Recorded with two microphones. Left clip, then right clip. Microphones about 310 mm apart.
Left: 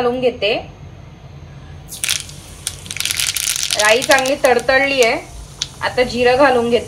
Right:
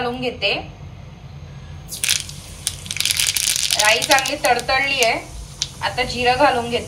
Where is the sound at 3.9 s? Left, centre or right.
Centre.